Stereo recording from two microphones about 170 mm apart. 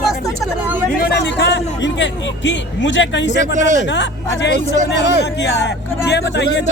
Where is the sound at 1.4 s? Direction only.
90° left.